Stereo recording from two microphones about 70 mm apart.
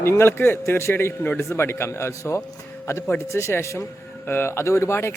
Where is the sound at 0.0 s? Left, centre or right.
Left.